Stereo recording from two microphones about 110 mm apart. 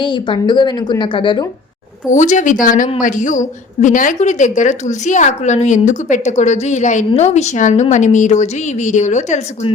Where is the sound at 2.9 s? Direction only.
90° left.